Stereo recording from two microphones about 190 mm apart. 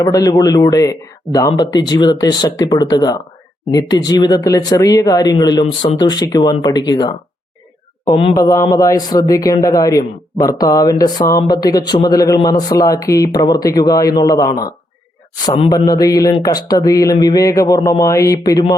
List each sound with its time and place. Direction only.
0.0 s speech: 20° left (ahead or behind)
8.4 s a man's voice: 15° left (ahead or behind)
15.7 s speech: 20° left (ahead or behind)